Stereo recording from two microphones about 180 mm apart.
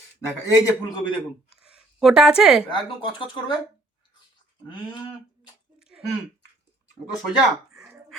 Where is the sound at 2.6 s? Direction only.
25° left (ahead or behind).